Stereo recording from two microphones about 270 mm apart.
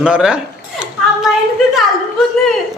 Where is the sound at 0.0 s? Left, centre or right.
Centre.